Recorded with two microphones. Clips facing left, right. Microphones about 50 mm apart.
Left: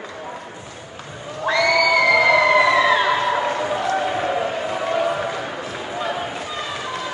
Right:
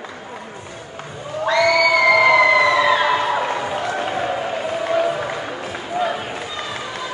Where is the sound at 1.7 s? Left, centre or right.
Centre.